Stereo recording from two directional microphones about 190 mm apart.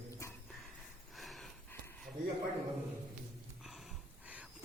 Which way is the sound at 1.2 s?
Centre (ahead or behind).